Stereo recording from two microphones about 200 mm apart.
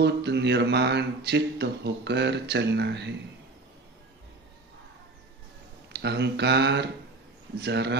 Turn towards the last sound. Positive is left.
turn(degrees=-55)  # may be behind; listen again after turning